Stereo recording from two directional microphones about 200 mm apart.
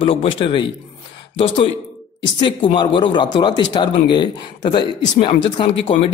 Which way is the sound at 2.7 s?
25° left (ahead or behind).